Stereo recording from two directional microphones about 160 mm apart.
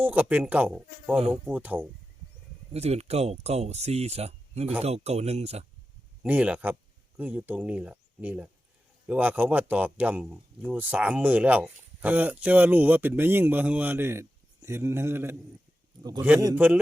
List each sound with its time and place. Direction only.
0.0 s speech: 10° right (ahead or behind)
2.7 s speech: 40° right (ahead or behind)
6.2 s speech: 10° right (ahead or behind)